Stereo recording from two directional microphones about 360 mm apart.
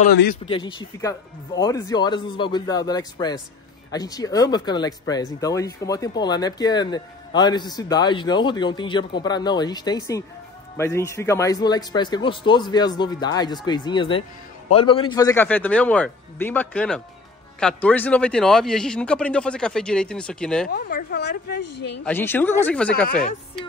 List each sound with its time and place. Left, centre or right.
0.0 s speech: left
0.5 s a man's voice: centre
20.7 s speech: left
22.0 s a man's voice: centre